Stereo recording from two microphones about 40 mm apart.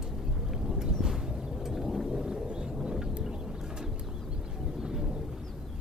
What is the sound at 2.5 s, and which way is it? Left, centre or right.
Vehicle, right.